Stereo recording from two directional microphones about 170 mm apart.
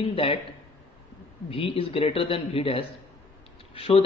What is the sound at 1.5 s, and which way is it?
Speech, 30° left (ahead or behind).